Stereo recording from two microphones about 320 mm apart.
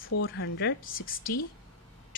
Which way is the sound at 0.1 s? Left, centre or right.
Left.